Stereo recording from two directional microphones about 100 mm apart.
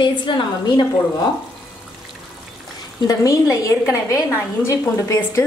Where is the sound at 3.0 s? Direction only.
35° left (ahead or behind).